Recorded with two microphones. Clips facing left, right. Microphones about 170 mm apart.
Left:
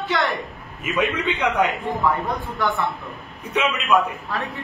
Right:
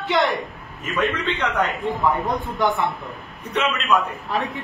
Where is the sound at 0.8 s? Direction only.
15° left (ahead or behind).